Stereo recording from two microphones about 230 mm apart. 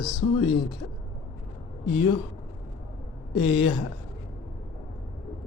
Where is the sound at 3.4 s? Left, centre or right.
Left.